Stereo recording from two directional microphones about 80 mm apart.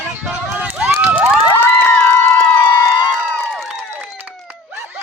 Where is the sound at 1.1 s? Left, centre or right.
Centre.